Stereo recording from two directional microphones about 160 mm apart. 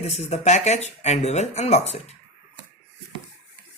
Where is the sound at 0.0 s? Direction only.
45° left (ahead or behind).